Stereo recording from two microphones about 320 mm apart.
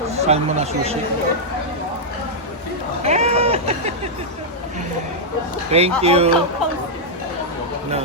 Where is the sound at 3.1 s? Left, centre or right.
Right.